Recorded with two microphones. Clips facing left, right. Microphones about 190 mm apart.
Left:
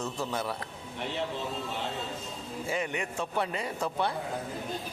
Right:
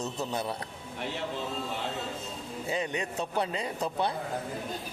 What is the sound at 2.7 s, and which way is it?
A man's voice, 20° right (ahead or behind).